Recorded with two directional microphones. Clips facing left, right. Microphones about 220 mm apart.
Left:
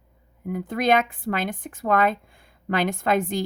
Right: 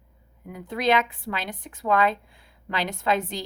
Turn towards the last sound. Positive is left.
turn(degrees=50)  # may be behind; listen again after turning